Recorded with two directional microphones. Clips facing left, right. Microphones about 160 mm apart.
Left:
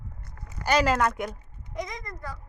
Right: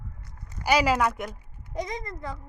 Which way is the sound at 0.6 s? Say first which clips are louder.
Even; 10° right (ahead or behind).